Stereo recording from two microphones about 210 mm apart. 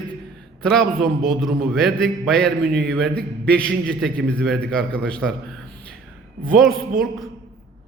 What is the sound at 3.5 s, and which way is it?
A man's voice, 5° left (ahead or behind).